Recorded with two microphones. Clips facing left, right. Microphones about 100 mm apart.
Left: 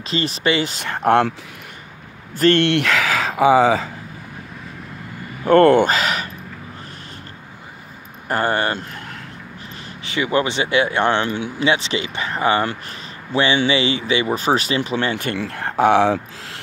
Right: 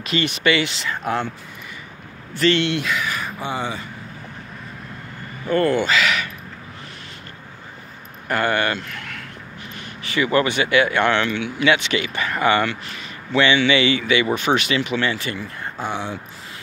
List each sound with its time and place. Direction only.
0.0 s speech: 30° left (ahead or behind)
0.8 s speech: 65° left (ahead or behind)
2.3 s speech: 50° left (ahead or behind); by 3.9 s 90° left
5.4 s speech: 60° left (ahead or behind); by 6.3 s 40° left (ahead or behind)
8.3 s speech: 35° left (ahead or behind)
10.0 s speech: 20° left (ahead or behind); by 11.5 s 40° left (ahead or behind)
11.6 s speech: 30° left (ahead or behind)
12.4 s speech: 35° left (ahead or behind); by 15.3 s 50° left (ahead or behind)
15.3 s speech: 90° left